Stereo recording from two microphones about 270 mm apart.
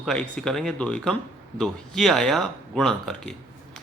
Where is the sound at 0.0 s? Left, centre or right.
Centre.